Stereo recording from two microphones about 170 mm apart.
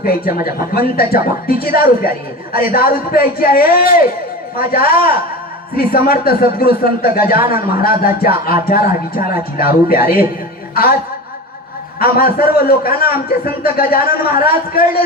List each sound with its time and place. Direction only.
0.0 s a woman's voice: 60° left (ahead or behind)
11.9 s a woman's voice: 60° left (ahead or behind)